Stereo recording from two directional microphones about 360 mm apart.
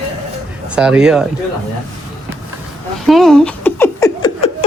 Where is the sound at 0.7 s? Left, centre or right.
Centre.